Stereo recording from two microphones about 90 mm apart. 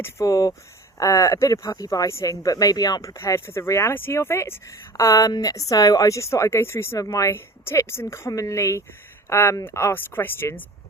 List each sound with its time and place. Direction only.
0.0 s speech: 35° left (ahead or behind)